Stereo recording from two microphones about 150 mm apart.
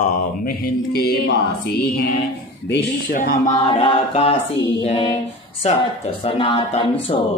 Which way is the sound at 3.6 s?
40° left (ahead or behind).